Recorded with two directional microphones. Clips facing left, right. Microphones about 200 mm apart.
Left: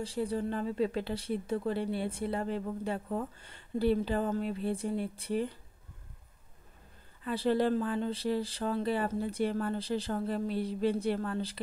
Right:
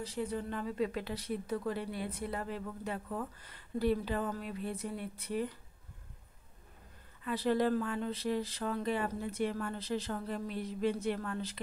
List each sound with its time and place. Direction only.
0.0 s speech: 30° left (ahead or behind)
7.2 s speech: 30° left (ahead or behind)